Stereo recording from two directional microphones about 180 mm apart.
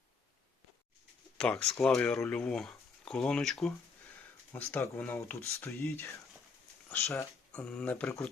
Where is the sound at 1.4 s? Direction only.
5° left (ahead or behind).